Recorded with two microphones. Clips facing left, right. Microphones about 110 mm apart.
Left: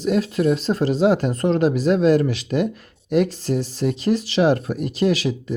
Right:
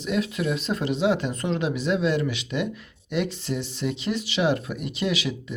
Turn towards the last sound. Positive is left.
turn(degrees=40)  # may be behind; listen again after turning